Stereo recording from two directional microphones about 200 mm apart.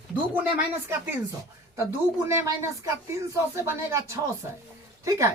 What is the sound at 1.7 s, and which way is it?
Speech, 15° right (ahead or behind).